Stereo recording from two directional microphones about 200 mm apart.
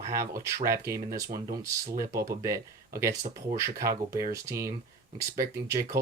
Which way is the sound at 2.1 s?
15° right (ahead or behind).